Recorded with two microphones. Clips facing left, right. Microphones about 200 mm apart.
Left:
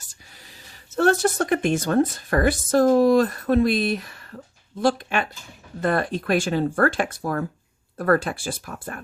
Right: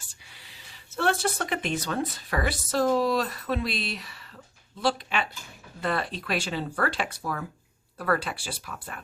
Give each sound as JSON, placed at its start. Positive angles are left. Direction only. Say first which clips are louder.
{"t": 0.9, "sound": "speech", "louder": "left 7 dB", "side_deg": 45}